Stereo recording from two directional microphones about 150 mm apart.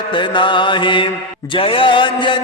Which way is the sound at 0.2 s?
30° left (ahead or behind).